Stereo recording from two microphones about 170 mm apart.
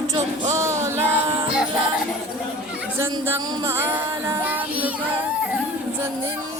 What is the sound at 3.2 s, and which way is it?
Child singing, 20° right (ahead or behind).